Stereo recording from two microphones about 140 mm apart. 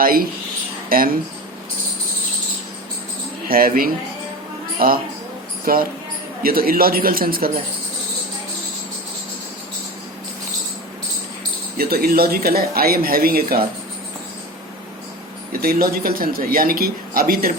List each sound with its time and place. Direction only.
0.0 s speech: 90° right
3.5 s speech: 90° right
11.8 s speech: 90° right
15.6 s speech: 90° right